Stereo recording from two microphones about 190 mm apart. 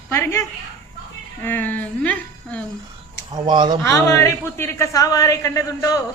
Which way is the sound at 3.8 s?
15° left (ahead or behind).